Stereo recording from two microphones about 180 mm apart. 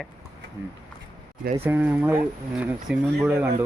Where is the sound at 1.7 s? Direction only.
10° right (ahead or behind).